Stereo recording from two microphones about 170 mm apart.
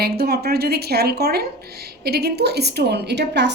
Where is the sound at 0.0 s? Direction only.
65° right (ahead or behind).